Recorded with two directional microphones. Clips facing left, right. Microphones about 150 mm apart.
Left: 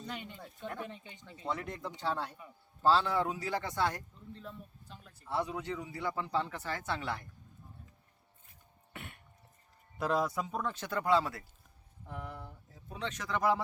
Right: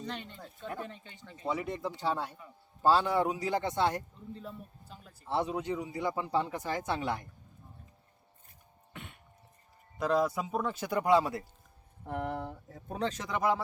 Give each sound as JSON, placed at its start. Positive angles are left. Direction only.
{"t": 0.0, "sound": "speech", "side_deg": 10}
{"t": 1.5, "sound": "speech", "side_deg": -5}
{"t": 4.4, "sound": "speech", "side_deg": -5}
{"t": 5.2, "sound": "speech", "side_deg": -25}
{"t": 8.9, "sound": "throat clearing", "side_deg": 5}
{"t": 10.0, "sound": "speech", "side_deg": 0}
{"t": 12.0, "sound": "speech", "side_deg": -70}
{"t": 12.9, "sound": "speech", "side_deg": -40}